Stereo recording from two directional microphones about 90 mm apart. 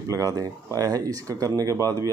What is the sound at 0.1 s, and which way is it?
Speech, 40° right (ahead or behind).